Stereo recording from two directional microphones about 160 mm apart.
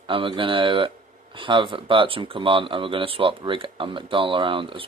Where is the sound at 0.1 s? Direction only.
30° right (ahead or behind).